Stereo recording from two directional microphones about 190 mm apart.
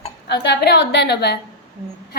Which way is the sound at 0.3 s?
60° left (ahead or behind).